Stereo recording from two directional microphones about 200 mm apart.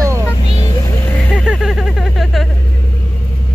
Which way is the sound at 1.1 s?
5° left (ahead or behind).